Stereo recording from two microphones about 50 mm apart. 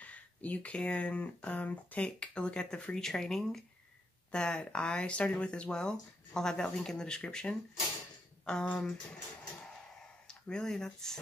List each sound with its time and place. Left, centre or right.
0.0 s speech: left; by 3.6 s centre
4.3 s speech: centre
8.7 s speech: centre